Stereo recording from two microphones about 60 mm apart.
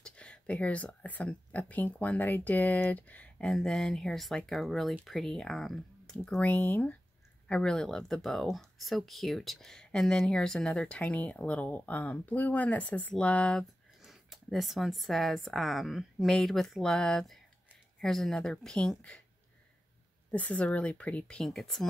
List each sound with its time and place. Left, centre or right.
0.0 s a sound: centre
1.0 s speech: left
3.4 s speech: centre
6.1 s speech: centre
6.5 s speech: left
7.4 s speech: centre
14.0 s speech: centre
20.2 s speech: left
21.5 s speech: centre